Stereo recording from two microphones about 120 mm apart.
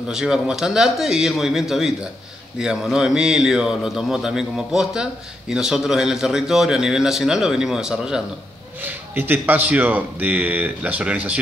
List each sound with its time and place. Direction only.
0.1 s a man's voice: 5° right (ahead or behind)
8.8 s speech: 15° right (ahead or behind)